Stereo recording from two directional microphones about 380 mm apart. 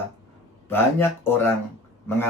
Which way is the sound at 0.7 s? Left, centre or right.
Centre.